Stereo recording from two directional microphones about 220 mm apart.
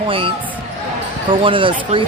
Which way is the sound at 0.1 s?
25° right (ahead or behind).